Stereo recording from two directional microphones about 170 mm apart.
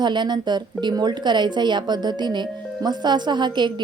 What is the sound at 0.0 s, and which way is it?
A woman's voice, 25° right (ahead or behind).